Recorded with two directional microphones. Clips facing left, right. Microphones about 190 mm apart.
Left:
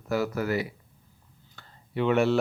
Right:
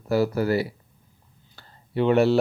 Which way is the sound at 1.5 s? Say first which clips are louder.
Right 5 dB; 35° right (ahead or behind).